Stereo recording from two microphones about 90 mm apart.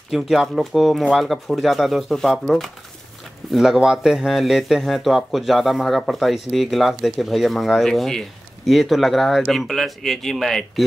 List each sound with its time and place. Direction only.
0.1 s speech: centre (ahead or behind)